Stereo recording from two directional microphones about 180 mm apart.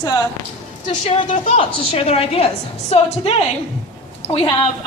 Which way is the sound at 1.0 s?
35° left (ahead or behind).